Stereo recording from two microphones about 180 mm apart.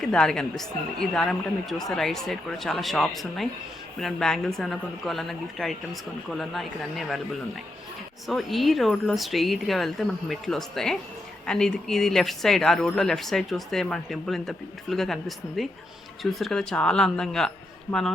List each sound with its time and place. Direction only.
0.0 s speech: 5° left (ahead or behind)
8.3 s speech: centre (ahead or behind)